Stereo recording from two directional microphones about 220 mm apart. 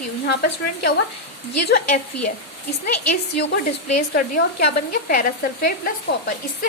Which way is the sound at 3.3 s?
45° left (ahead or behind).